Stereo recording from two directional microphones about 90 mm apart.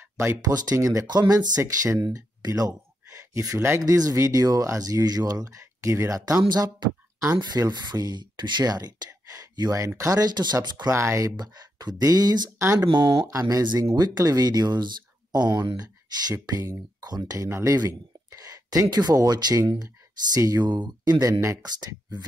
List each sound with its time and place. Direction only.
0.0 s a sound: 20° right (ahead or behind)
0.7 s speech: 35° right (ahead or behind)
1.0 s speech: 50° right (ahead or behind)
1.6 s speech: 30° right (ahead or behind)
2.1 s speech: 45° right (ahead or behind)
6.8 s speech: 55° right (ahead or behind)
10.9 s speech: 30° right (ahead or behind)
17.5 s speech: 30° right (ahead or behind)
17.7 s speech: 40° right (ahead or behind)